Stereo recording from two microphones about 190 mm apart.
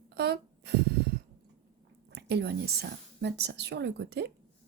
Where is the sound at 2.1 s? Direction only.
60° right (ahead or behind).